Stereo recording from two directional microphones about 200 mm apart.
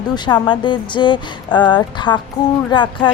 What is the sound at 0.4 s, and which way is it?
A woman's voice, 25° left (ahead or behind).